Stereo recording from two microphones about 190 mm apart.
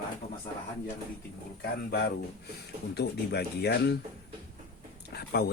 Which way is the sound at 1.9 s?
60° left (ahead or behind).